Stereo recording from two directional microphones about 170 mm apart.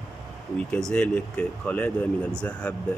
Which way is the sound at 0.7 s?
5° left (ahead or behind).